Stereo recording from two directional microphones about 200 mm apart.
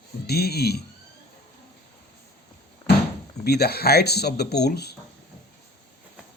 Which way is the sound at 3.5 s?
55° left (ahead or behind).